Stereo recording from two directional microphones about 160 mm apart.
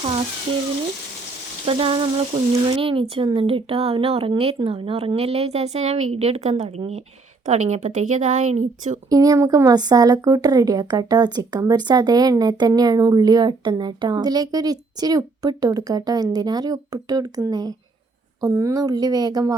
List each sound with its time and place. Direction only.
1.6 s a woman's voice: 35° right (ahead or behind)
9.0 s a woman's voice: 20° right (ahead or behind)